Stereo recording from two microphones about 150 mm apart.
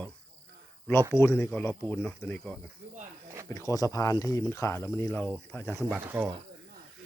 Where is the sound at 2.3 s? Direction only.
5° left (ahead or behind).